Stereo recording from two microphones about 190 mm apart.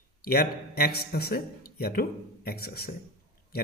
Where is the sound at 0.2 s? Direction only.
55° left (ahead or behind).